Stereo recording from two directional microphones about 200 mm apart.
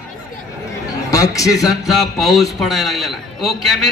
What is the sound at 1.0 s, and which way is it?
Speech, 15° left (ahead or behind).